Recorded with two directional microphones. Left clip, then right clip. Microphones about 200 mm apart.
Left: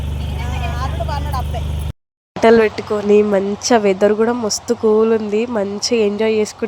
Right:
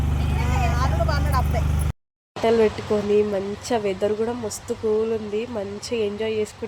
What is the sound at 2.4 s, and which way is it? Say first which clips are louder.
Speech: left 8 dB; 20° left (ahead or behind).